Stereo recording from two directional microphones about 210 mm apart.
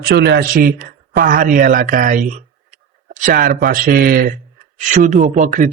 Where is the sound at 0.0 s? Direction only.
50° right (ahead or behind).